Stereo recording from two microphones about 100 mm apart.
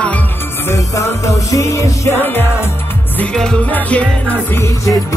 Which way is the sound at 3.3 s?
10° left (ahead or behind).